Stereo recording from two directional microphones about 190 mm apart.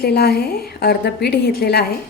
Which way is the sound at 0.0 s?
55° left (ahead or behind).